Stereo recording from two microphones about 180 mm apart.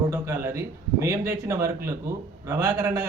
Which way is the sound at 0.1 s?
15° right (ahead or behind).